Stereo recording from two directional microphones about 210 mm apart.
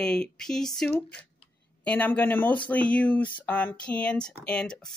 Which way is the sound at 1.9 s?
5° left (ahead or behind).